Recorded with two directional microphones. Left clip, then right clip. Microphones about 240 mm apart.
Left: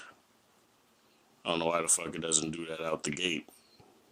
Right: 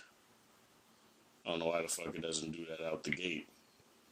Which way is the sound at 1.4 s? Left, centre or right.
Left.